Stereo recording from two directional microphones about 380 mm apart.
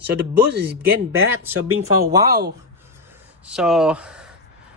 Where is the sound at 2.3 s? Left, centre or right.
Right.